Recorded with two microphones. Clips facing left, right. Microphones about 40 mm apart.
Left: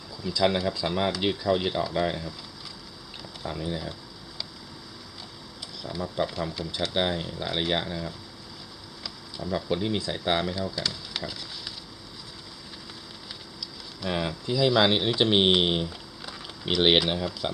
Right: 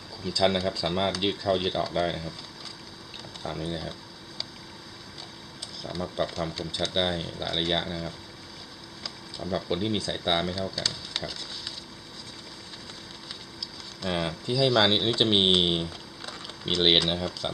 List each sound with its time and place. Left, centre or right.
0.3 s speech: centre
3.4 s speech: centre
5.8 s speech: centre
13.6 s speech: centre